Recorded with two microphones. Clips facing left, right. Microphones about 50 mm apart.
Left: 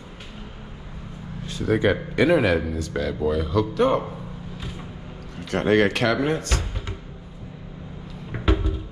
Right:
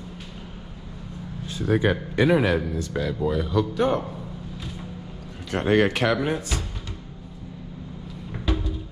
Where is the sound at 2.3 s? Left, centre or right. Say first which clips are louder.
Left 1 dB; centre.